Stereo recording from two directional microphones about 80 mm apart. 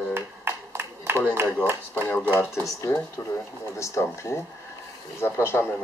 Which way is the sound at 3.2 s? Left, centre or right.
Left.